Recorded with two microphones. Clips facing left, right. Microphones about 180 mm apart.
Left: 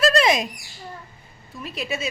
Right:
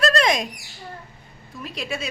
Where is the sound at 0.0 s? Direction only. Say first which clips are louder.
Left 2 dB; 5° left (ahead or behind).